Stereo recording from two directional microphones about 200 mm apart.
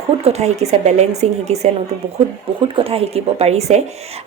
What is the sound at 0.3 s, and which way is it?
Speech, 35° right (ahead or behind).